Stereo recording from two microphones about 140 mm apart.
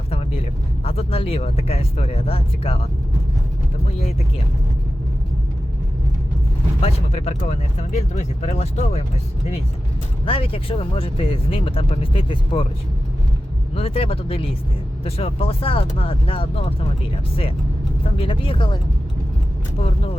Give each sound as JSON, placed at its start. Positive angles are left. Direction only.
{"t": 0.1, "sound": "a sound", "side_deg": 45}
{"t": 0.9, "sound": "speech", "side_deg": 45}
{"t": 6.8, "sound": "speech", "side_deg": 50}
{"t": 10.2, "sound": "speech", "side_deg": 40}
{"t": 13.7, "sound": "speech", "side_deg": 45}
{"t": 18.2, "sound": "speech", "side_deg": 40}